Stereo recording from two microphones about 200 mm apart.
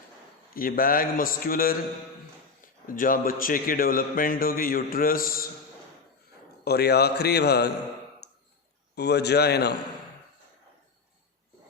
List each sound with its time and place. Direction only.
0.5 s a man's voice: 45° left (ahead or behind)
2.8 s a man's voice: 45° left (ahead or behind)
6.7 s a man's voice: 55° left (ahead or behind)
9.0 s a man's voice: 55° left (ahead or behind)